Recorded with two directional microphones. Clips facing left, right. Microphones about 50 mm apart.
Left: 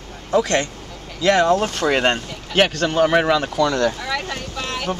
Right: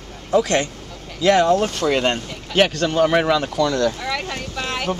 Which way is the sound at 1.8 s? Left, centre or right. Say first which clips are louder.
Left 1 dB; left.